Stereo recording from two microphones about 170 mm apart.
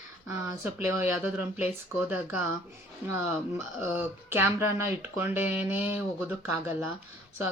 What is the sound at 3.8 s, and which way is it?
Speech, 15° right (ahead or behind).